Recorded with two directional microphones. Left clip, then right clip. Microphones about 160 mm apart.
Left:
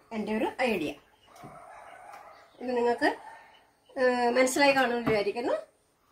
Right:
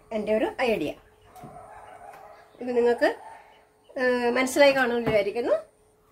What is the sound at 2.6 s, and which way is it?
A woman's voice, 40° right (ahead or behind).